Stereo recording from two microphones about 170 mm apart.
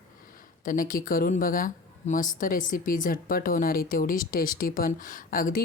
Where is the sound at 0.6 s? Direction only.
55° left (ahead or behind).